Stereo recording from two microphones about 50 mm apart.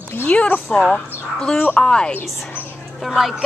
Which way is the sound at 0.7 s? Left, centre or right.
Centre.